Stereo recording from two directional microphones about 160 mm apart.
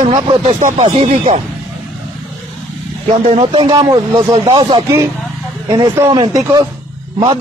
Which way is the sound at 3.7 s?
25° right (ahead or behind).